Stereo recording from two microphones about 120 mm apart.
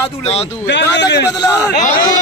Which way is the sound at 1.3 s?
20° left (ahead or behind).